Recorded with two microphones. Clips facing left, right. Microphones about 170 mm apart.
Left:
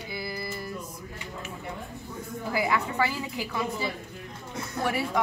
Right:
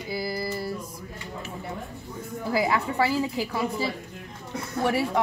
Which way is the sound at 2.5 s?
35° right (ahead or behind).